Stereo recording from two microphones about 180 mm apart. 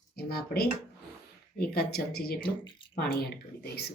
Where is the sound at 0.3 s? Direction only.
60° left (ahead or behind).